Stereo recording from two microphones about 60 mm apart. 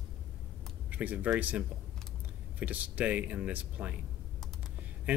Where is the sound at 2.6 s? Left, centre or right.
Right.